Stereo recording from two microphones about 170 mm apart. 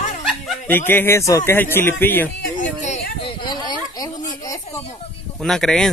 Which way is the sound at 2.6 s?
45° left (ahead or behind).